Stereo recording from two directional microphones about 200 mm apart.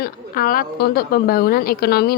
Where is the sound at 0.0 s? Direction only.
45° left (ahead or behind).